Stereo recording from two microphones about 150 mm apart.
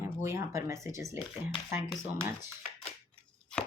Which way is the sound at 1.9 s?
5° left (ahead or behind).